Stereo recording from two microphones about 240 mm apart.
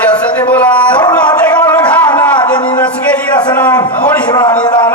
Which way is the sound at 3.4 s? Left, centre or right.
Centre.